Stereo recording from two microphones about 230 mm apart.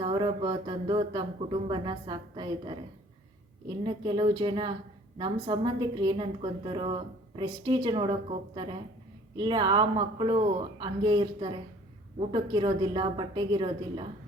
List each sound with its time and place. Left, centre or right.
0.0 s a woman's voice: right